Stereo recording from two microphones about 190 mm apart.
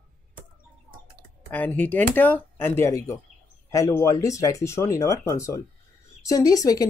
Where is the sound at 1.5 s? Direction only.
10° left (ahead or behind).